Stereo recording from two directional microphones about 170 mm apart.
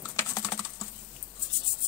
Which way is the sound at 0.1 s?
15° left (ahead or behind).